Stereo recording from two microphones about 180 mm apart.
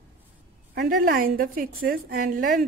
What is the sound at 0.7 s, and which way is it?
A woman's voice, 55° right (ahead or behind).